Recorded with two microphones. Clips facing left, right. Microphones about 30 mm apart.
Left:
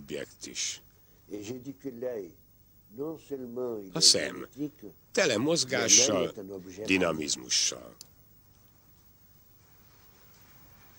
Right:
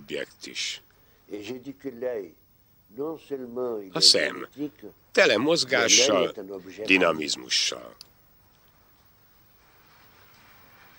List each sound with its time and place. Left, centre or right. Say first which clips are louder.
0.0 s speech: right 5 dB; right
9.8 s vehicle: right 7 dB; right